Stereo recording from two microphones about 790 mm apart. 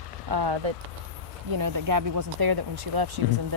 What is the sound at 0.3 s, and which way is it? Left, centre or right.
Speech, right.